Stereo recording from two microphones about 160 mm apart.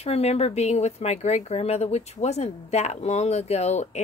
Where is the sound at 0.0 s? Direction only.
40° left (ahead or behind).